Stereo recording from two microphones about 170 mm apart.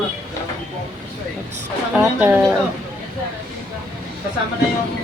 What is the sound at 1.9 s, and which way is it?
Speech, 10° right (ahead or behind).